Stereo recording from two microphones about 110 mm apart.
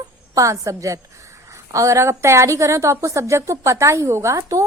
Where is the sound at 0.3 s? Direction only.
30° right (ahead or behind).